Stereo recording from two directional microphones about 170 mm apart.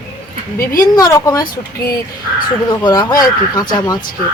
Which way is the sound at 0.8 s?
20° left (ahead or behind).